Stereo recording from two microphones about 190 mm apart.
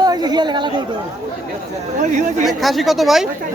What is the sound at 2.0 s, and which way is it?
Speech, 40° right (ahead or behind).